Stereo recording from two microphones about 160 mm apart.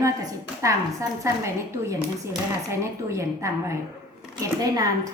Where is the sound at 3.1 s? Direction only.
20° right (ahead or behind).